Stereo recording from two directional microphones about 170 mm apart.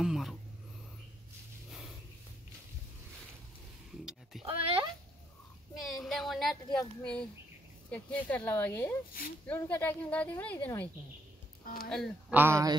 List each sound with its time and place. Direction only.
0.0 s a sound: centre (ahead or behind)
4.0 s cat: 5° right (ahead or behind)
4.5 s speech: 35° right (ahead or behind)
6.0 s a woman's voice: centre (ahead or behind)
11.6 s speech: 55° left (ahead or behind)
11.9 s a woman's voice: centre (ahead or behind)
12.4 s speech: 15° right (ahead or behind)